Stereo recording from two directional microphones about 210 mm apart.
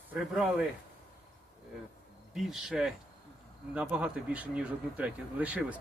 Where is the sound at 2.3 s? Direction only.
Centre (ahead or behind).